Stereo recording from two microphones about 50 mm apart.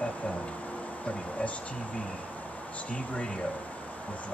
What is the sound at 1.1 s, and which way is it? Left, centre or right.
Speech, left.